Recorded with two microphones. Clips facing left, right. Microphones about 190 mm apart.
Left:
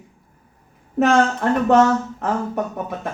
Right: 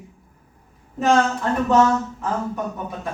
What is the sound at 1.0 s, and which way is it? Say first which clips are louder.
Speech: left 2 dB; 65° left (ahead or behind).